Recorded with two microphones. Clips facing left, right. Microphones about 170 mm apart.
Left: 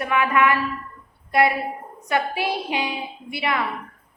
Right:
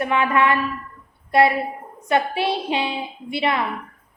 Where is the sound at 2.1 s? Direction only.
25° right (ahead or behind).